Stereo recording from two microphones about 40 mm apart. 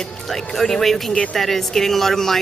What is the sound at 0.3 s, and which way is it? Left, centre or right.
A man's voice, centre.